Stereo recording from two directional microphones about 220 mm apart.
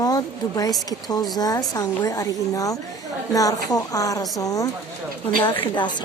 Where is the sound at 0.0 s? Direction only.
15° left (ahead or behind).